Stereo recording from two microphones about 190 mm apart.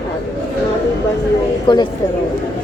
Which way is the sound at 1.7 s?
25° left (ahead or behind).